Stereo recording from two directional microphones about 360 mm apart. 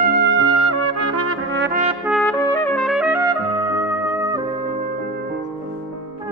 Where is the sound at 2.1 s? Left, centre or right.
Centre.